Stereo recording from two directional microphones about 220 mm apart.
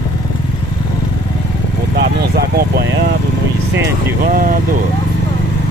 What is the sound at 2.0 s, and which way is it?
Speech, 45° right (ahead or behind).